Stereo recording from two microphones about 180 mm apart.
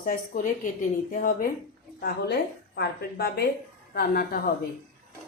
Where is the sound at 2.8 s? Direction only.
60° left (ahead or behind).